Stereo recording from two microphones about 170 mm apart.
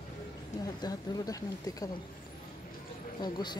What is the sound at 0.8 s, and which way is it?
Speech, 20° left (ahead or behind).